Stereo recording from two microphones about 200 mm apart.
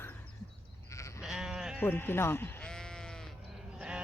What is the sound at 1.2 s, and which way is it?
Sheep, 5° right (ahead or behind).